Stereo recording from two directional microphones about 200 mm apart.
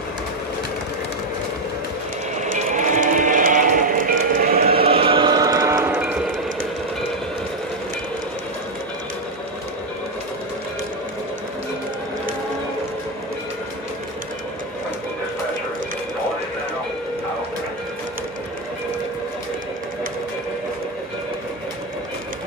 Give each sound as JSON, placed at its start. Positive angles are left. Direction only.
{"t": 2.3, "sound": "a sound", "side_deg": -35}
{"t": 4.7, "sound": "chant", "side_deg": -25}
{"t": 5.9, "sound": "train", "side_deg": -5}